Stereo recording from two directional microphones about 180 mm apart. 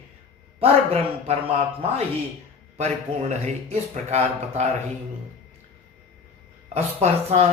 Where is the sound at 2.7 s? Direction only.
40° right (ahead or behind).